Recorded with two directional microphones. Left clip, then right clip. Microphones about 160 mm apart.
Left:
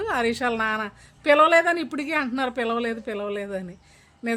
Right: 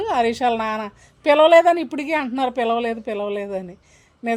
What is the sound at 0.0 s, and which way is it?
A woman's voice, 15° right (ahead or behind).